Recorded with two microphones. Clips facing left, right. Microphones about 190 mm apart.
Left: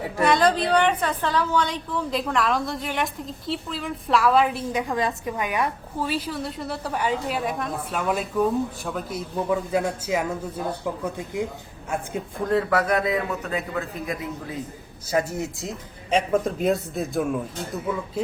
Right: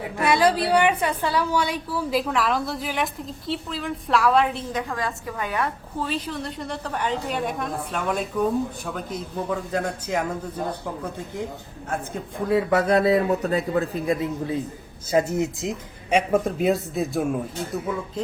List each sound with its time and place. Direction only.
0.3 s a woman's voice: 10° right (ahead or behind)
12.7 s a man's voice: 25° right (ahead or behind)
16.0 s a woman's voice: 10° right (ahead or behind)